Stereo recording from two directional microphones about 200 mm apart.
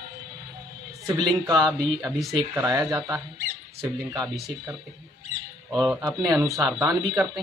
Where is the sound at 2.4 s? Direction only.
20° right (ahead or behind).